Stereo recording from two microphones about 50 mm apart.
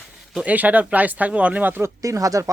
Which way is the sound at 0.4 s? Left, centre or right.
Right.